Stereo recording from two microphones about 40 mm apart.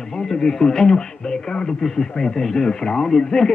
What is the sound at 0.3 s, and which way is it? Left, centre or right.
Speech, centre.